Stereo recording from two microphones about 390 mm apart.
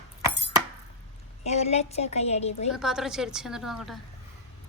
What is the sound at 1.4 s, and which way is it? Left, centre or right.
A woman's voice, centre.